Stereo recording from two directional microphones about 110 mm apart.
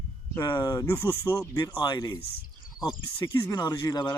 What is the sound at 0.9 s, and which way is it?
Speech, 25° left (ahead or behind).